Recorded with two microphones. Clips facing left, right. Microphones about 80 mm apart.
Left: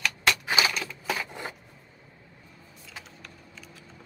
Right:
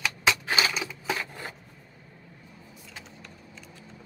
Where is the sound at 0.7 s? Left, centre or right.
Centre.